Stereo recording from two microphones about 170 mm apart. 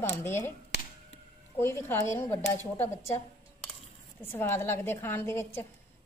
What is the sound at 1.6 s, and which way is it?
A woman's voice, 15° left (ahead or behind).